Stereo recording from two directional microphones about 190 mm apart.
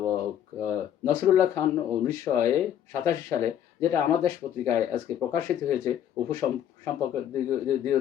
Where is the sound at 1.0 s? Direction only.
15° left (ahead or behind).